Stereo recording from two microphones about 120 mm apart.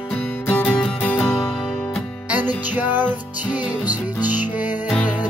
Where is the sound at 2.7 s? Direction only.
15° right (ahead or behind).